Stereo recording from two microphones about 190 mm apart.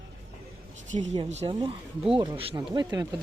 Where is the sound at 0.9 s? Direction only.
35° right (ahead or behind).